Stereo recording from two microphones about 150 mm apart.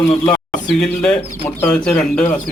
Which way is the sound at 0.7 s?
5° left (ahead or behind).